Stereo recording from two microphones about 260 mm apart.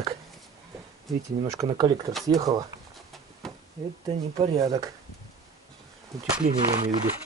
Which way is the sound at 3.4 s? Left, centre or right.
Centre.